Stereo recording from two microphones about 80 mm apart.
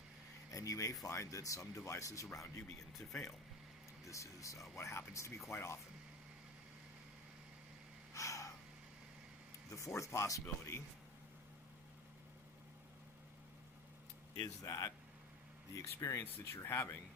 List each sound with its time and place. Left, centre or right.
0.5 s speech: left
4.0 s speech: left
8.1 s gasp: left
9.6 s speech: left
14.3 s speech: left